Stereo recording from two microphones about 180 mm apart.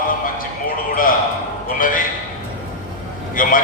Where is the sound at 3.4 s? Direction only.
50° left (ahead or behind).